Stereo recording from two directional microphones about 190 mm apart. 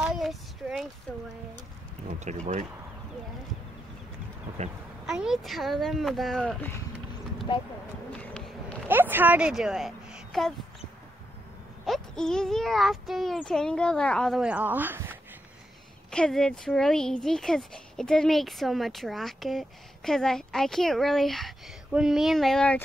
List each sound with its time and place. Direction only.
0.0 s child singing: centre (ahead or behind)
2.0 s speech: 40° right (ahead or behind)
5.0 s speech: 5° right (ahead or behind)
8.1 s a sound: 5° left (ahead or behind)
8.8 s speech: 10° right (ahead or behind)
11.8 s speech: centre (ahead or behind)
16.1 s speech: 5° left (ahead or behind)